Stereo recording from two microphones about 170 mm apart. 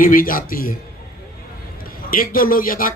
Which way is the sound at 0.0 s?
55° left (ahead or behind).